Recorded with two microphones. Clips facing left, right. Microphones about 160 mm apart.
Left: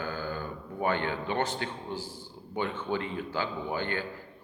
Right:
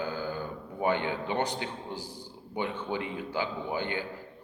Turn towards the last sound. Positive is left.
turn(degrees=-15)  # may be behind; listen again after turning